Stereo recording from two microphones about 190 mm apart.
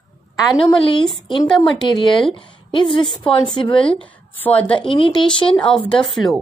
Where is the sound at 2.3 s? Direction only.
25° left (ahead or behind).